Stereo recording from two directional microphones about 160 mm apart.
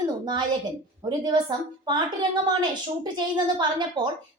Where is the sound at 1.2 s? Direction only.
25° right (ahead or behind).